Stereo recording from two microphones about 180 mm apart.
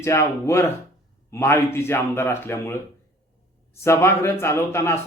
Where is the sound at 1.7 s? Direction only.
15° left (ahead or behind).